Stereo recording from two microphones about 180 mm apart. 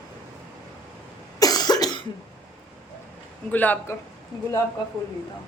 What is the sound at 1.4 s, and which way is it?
Cough, 20° left (ahead or behind).